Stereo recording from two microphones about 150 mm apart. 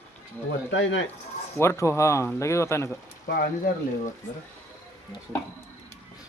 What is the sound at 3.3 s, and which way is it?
Speech, 90° left.